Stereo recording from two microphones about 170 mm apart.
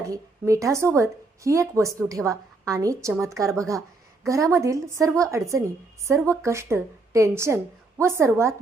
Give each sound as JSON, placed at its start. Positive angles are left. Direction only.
{"t": 0.0, "sound": "a woman's voice", "side_deg": -20}